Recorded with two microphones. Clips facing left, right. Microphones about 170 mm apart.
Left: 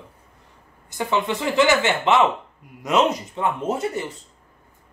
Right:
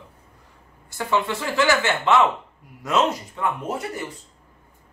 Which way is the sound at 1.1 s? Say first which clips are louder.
Left 1 dB; 20° left (ahead or behind).